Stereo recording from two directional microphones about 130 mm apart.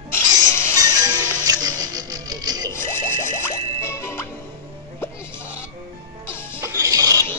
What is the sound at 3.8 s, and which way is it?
Music, 20° left (ahead or behind).